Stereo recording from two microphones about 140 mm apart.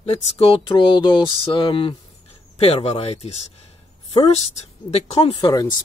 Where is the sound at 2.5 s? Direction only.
50° left (ahead or behind).